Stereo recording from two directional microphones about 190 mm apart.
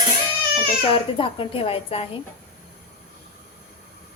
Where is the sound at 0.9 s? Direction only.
30° left (ahead or behind).